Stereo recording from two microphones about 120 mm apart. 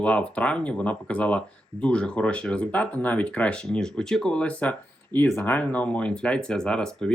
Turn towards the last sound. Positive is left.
turn(degrees=5)  # may be behind; listen again after turning